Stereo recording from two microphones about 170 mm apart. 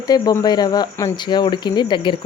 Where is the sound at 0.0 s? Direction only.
20° left (ahead or behind).